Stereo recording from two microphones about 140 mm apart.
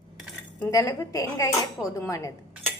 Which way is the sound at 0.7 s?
25° left (ahead or behind).